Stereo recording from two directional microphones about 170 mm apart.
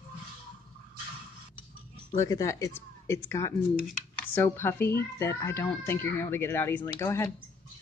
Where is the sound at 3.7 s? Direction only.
5° right (ahead or behind).